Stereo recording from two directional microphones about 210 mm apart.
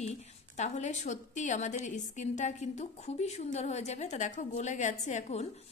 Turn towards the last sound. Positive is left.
turn(degrees=35)  # may be behind; listen again after turning